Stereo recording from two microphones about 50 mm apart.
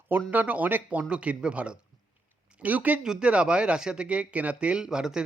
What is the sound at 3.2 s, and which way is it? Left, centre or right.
Speech, right.